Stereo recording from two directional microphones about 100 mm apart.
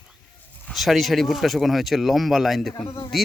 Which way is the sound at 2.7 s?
25° left (ahead or behind).